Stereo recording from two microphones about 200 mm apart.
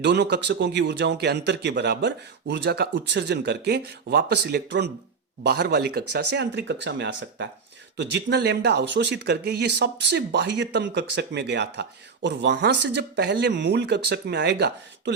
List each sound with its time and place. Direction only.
0.0 s speech: 55° right (ahead or behind)